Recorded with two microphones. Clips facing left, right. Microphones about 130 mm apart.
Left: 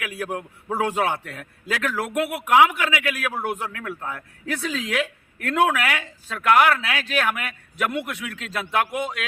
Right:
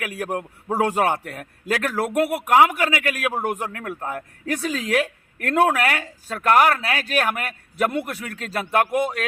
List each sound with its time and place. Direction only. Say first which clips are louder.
0.0 s a man's voice: right 2 dB; 45° right (ahead or behind)